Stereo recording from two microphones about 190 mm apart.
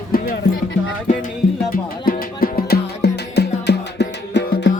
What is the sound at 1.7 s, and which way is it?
Music, 50° left (ahead or behind).